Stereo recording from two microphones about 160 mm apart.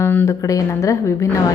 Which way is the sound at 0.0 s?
15° left (ahead or behind).